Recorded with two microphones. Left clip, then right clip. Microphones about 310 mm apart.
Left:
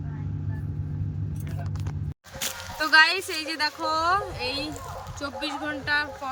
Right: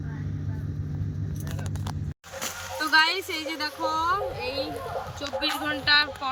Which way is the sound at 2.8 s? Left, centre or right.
Centre.